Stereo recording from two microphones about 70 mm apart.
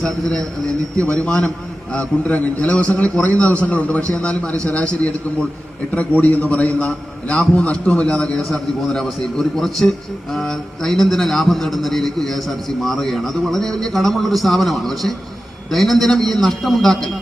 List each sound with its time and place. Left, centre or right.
0.0 s a man's voice: centre